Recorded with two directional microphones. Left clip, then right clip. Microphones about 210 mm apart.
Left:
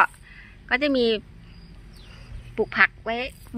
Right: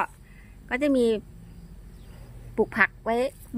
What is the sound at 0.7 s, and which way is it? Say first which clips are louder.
Speech: left 2 dB; 15° right (ahead or behind).